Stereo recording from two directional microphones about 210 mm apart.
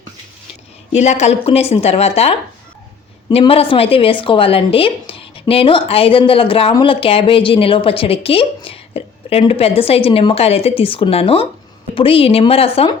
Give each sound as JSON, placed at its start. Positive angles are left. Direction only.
{"t": 0.9, "sound": "a woman's voice", "side_deg": 30}